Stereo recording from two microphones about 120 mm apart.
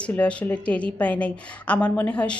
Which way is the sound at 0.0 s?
10° left (ahead or behind).